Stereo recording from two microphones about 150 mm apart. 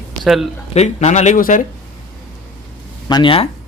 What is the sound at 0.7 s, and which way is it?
Speech, 50° left (ahead or behind).